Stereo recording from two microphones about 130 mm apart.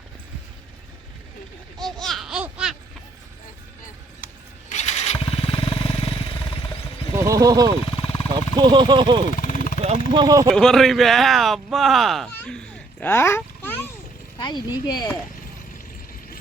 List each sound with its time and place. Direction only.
1.8 s laughter: centre (ahead or behind)
4.7 s motorcycle: 60° left (ahead or behind); by 6.6 s 45° left (ahead or behind)
7.2 s speech: 25° right (ahead or behind)
7.9 s a sound: 50° left (ahead or behind)
8.5 s speech: 35° right (ahead or behind)
9.3 s vehicle: 85° left
10.1 s speech: 35° right (ahead or behind)
10.5 s speech: 5° left (ahead or behind)
12.3 s a sound: 10° left (ahead or behind)
14.3 s speech: 35° left (ahead or behind)